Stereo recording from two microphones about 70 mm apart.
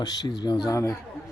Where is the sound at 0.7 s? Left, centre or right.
Left.